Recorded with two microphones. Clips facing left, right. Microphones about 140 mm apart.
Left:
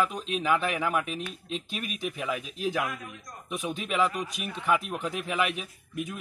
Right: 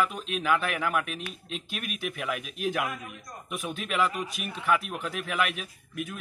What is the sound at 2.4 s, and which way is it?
Speech, 25° left (ahead or behind).